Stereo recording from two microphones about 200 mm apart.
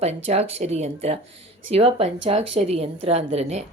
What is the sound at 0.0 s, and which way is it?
A woman's voice, 30° right (ahead or behind).